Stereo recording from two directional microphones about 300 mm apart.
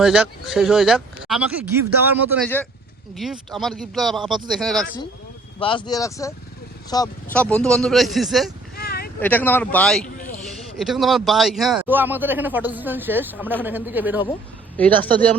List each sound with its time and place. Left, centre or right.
0.0 s speech: centre
5.5 s speech: centre
8.7 s vehicle: left
9.2 s speech: centre
10.2 s a sound: left
10.4 s speech: centre
14.8 s speech: centre